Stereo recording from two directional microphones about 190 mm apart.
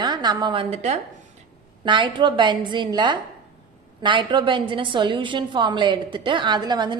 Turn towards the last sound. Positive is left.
turn(degrees=-25)  # may be behind; listen again after turning